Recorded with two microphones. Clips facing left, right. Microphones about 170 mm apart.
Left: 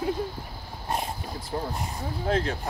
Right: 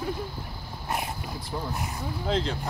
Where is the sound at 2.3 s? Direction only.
60° left (ahead or behind).